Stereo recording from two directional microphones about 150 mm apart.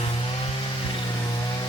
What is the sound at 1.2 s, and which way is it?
Vehicle, 25° left (ahead or behind).